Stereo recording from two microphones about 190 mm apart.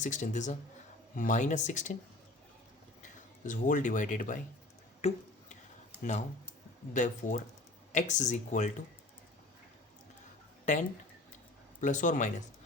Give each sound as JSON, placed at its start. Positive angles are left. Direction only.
{"t": 0.0, "sound": "speech", "side_deg": 40}
{"t": 3.0, "sound": "speech", "side_deg": 40}
{"t": 5.0, "sound": "tick-tock", "side_deg": 35}
{"t": 6.0, "sound": "speech", "side_deg": 40}
{"t": 11.8, "sound": "speech", "side_deg": 40}